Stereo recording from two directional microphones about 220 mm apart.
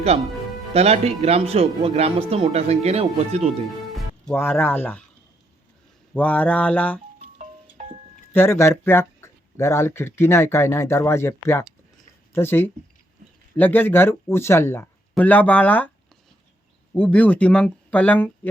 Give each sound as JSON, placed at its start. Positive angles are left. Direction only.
{"t": 0.7, "sound": "speech", "side_deg": -30}
{"t": 3.9, "sound": "speech", "side_deg": 5}
{"t": 6.1, "sound": "speech", "side_deg": 5}
{"t": 7.3, "sound": "music", "side_deg": -35}
{"t": 8.3, "sound": "speech", "side_deg": 10}
{"t": 16.9, "sound": "speech", "side_deg": 5}